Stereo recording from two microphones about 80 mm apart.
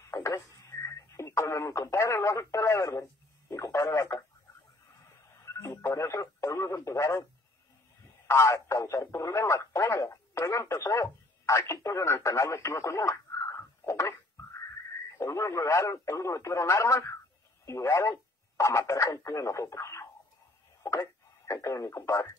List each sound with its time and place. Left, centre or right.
0.1 s speech: left
5.4 s speech: left
8.3 s speech: left
21.5 s speech: left